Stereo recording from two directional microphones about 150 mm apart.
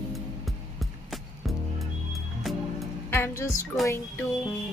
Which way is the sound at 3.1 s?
20° left (ahead or behind).